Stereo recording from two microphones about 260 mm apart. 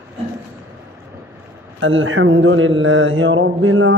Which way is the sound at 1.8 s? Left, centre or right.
Right.